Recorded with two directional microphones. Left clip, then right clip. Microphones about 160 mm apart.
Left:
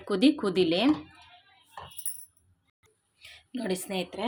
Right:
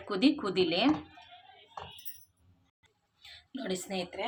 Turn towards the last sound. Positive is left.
turn(degrees=45)  # may be behind; listen again after turning